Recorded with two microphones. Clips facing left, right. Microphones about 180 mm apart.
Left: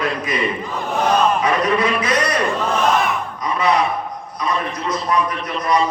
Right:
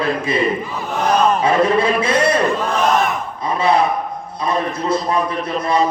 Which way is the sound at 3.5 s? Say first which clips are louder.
Right 2 dB; 30° right (ahead or behind).